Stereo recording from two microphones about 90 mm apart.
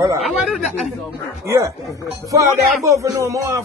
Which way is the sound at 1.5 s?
35° right (ahead or behind).